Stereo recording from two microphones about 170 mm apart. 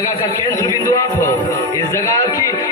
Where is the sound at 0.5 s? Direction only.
15° left (ahead or behind).